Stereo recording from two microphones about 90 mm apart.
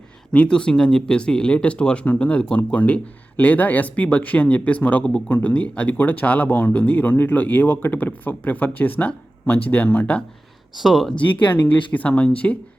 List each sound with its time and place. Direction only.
0.3 s speech: 10° left (ahead or behind)
10.8 s speech: centre (ahead or behind)
11.2 s speech: 20° left (ahead or behind)